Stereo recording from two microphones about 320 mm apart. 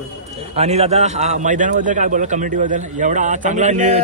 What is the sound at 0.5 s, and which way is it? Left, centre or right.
A man's voice, centre.